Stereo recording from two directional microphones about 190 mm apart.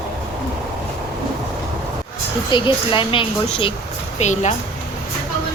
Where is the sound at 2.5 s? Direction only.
25° left (ahead or behind).